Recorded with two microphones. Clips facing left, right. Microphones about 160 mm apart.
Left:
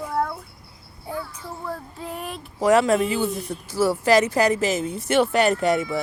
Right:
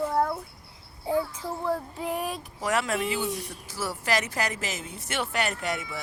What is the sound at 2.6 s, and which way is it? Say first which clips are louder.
Speech: left 9 dB; 30° left (ahead or behind).